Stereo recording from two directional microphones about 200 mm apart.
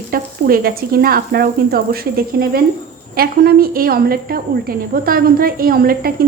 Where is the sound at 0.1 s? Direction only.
45° right (ahead or behind).